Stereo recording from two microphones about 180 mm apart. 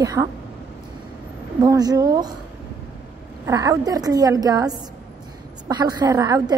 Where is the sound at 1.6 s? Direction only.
20° right (ahead or behind).